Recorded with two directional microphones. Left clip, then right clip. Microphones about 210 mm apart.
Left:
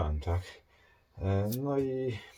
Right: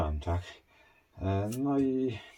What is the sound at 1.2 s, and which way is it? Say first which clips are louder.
Speech: right 1 dB; 25° right (ahead or behind).